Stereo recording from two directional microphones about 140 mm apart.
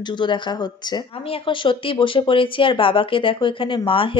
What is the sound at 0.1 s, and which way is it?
Speech, 35° left (ahead or behind).